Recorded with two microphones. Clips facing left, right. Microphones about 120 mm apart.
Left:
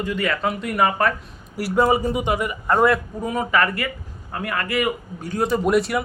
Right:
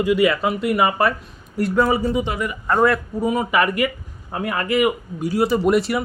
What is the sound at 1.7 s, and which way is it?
Speech, 15° left (ahead or behind).